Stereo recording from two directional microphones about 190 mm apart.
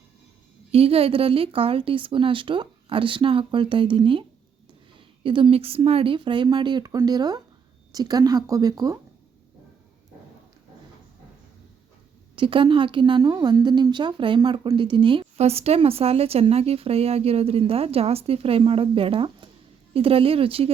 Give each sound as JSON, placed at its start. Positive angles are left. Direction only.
{"t": 0.7, "sound": "a woman's voice", "side_deg": -30}
{"t": 12.4, "sound": "a woman's voice", "side_deg": -25}